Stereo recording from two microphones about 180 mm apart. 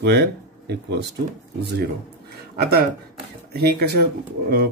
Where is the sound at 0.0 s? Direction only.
65° right (ahead or behind).